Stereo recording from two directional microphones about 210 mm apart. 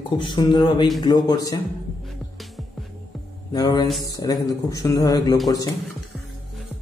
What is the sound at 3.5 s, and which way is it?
Speech, 20° left (ahead or behind).